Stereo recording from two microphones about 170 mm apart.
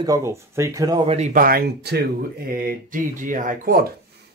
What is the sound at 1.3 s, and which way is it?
Speech, 60° right (ahead or behind).